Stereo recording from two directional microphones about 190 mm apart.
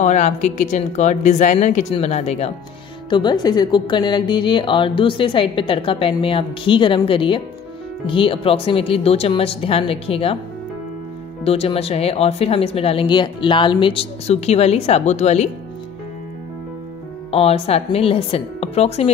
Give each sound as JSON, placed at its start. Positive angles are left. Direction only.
{"t": 0.0, "sound": "speech", "side_deg": 40}
{"t": 3.1, "sound": "a woman's voice", "side_deg": 25}
{"t": 11.4, "sound": "speech", "side_deg": 30}
{"t": 17.3, "sound": "speech", "side_deg": 30}